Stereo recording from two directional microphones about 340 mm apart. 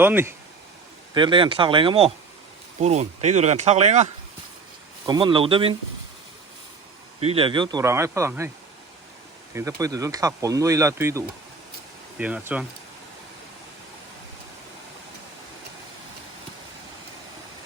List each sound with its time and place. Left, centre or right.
0.0 s speech: centre
7.2 s speech: centre
9.6 s speech: centre